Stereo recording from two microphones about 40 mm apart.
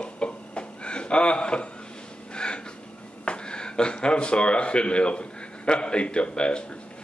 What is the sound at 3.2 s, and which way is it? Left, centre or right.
Speech, left.